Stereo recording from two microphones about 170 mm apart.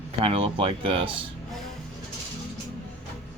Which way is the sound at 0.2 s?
35° right (ahead or behind).